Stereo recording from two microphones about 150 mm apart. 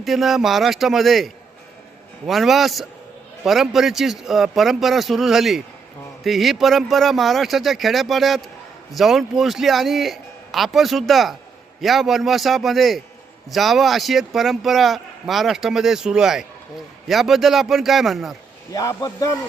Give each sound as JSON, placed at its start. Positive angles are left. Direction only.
{"t": 0.0, "sound": "speech", "side_deg": 0}
{"t": 18.7, "sound": "speech", "side_deg": 25}